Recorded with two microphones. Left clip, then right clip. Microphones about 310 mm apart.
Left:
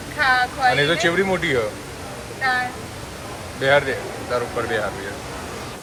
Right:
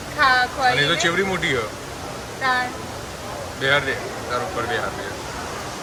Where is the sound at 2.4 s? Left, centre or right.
Centre.